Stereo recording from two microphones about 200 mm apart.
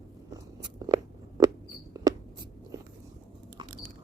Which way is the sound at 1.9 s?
15° right (ahead or behind).